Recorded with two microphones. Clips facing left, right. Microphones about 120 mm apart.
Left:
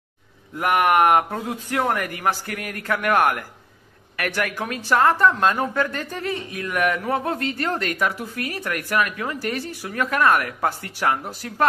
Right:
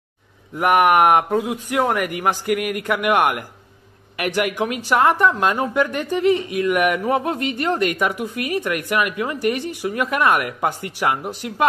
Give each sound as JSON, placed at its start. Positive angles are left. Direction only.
{"t": 0.6, "sound": "speech", "side_deg": -15}